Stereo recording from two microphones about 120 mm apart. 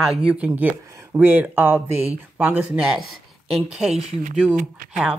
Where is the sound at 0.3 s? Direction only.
10° right (ahead or behind).